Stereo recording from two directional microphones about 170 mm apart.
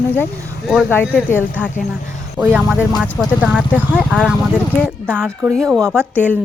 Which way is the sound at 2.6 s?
Centre (ahead or behind).